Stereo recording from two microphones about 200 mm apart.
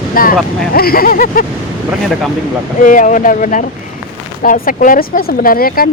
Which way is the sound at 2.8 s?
40° left (ahead or behind).